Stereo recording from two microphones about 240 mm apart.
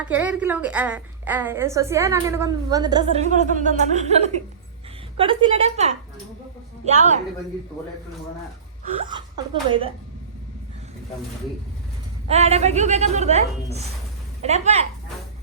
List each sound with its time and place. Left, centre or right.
0.0 s a woman's voice: centre; by 7.2 s right
9.6 s a woman's voice: right
12.3 s a woman's voice: right